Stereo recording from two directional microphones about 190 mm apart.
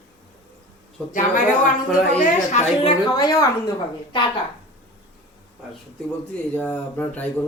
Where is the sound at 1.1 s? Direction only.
45° left (ahead or behind).